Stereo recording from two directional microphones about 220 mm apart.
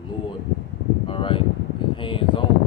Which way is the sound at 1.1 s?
25° left (ahead or behind).